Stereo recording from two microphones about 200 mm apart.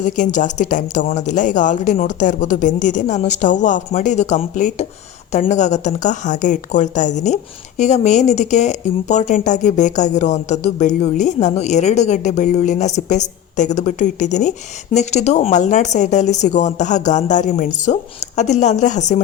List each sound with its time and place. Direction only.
0.0 s a woman's voice: 40° left (ahead or behind)